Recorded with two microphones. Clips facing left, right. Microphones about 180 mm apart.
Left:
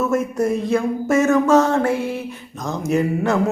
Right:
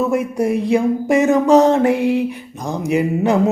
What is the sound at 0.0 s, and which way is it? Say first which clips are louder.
Speech: right 2 dB; 15° right (ahead or behind).